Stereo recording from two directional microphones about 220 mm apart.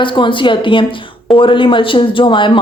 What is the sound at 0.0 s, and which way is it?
A woman's voice, 20° left (ahead or behind).